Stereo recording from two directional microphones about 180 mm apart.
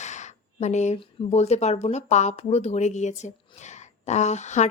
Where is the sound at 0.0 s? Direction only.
40° left (ahead or behind).